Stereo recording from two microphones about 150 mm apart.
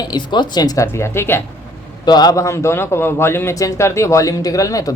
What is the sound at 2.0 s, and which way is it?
Speech, 25° left (ahead or behind).